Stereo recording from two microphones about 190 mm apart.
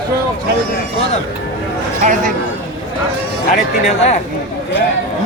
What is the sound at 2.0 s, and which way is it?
Speech, 45° right (ahead or behind).